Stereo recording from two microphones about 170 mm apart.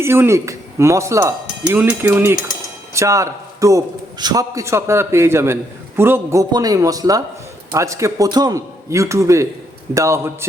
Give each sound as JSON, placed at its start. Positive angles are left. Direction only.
{"t": 0.0, "sound": "a man's voice", "side_deg": -15}